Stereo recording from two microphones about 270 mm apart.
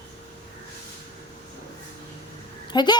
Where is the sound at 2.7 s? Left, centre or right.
Centre.